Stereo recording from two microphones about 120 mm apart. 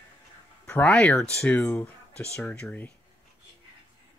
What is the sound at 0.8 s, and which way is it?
Speech, 5° left (ahead or behind).